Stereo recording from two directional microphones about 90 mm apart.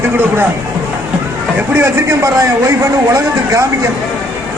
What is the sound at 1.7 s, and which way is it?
A man's voice, 30° right (ahead or behind).